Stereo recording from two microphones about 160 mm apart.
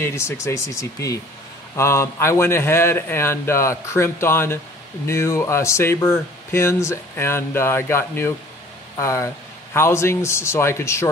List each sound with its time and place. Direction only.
0.0 s speech: 15° left (ahead or behind)